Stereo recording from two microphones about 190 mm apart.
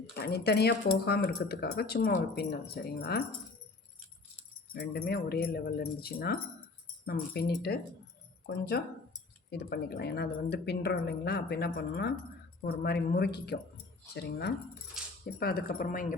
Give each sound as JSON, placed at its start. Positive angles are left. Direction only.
{"t": 0.1, "sound": "speech", "side_deg": 60}
{"t": 4.7, "sound": "speech", "side_deg": 55}